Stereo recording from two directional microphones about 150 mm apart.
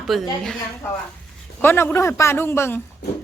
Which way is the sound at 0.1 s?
Centre (ahead or behind).